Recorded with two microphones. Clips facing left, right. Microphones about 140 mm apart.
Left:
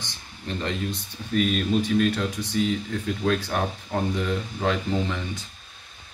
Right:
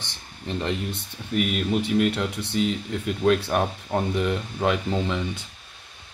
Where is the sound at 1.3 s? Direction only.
15° right (ahead or behind).